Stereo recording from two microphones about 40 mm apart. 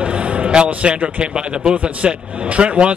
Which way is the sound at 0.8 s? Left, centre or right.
Right.